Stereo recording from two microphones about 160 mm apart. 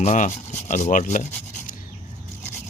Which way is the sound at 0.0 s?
50° left (ahead or behind).